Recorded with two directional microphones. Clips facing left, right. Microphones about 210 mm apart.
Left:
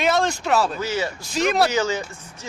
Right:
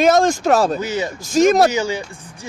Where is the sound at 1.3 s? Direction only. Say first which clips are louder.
Right 7 dB; 45° right (ahead or behind).